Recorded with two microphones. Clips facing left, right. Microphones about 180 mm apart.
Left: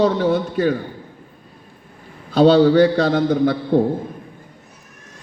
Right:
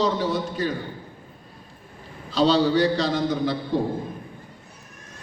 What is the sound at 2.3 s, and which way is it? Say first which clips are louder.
A man's voice: left 7 dB; 55° left (ahead or behind).